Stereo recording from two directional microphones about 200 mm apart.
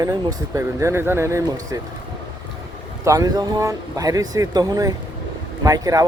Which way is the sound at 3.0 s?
15° right (ahead or behind).